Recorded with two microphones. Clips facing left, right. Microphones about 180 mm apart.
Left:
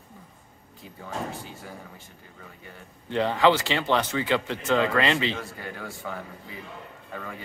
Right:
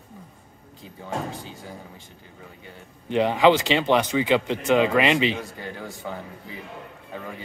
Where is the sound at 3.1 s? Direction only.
15° right (ahead or behind).